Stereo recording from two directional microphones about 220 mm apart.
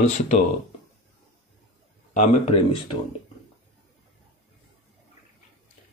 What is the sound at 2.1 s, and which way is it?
Speech, 25° left (ahead or behind).